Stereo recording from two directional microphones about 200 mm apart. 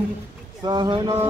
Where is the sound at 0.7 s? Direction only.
20° right (ahead or behind).